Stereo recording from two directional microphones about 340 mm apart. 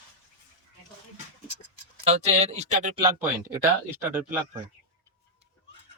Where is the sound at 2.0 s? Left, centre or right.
Centre.